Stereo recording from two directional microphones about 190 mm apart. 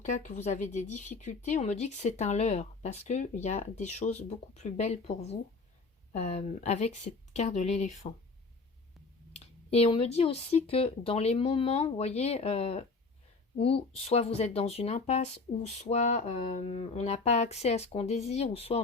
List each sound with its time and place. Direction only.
0.0 s speech: 40° left (ahead or behind)
9.3 s speech: 30° left (ahead or behind)